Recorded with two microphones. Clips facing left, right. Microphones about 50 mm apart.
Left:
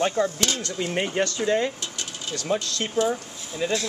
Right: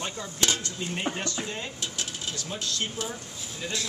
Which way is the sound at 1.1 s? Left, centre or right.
Left.